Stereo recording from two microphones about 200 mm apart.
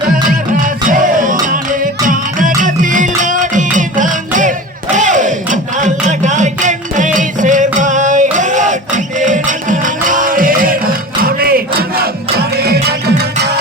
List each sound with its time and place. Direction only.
0.3 s music: 40° right (ahead or behind)